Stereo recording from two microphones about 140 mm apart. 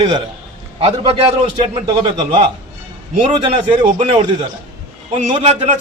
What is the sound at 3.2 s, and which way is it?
Speech, 35° right (ahead or behind).